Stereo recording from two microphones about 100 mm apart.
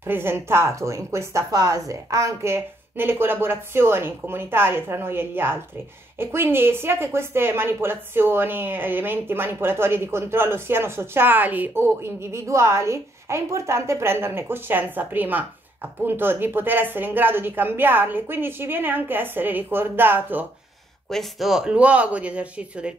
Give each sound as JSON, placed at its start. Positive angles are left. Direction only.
{"t": 0.0, "sound": "a woman's voice", "side_deg": -25}
{"t": 21.1, "sound": "speech", "side_deg": 0}